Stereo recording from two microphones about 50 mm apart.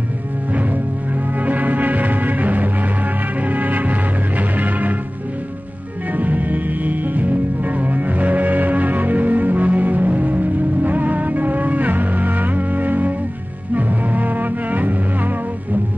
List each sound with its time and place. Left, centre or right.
1.4 s music: right
6.1 s music: right